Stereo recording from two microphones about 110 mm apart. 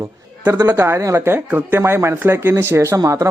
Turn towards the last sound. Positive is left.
turn(degrees=-30)  # may be behind; listen again after turning